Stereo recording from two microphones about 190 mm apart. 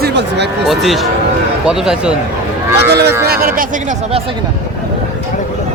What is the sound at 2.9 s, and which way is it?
Speech, 60° right (ahead or behind).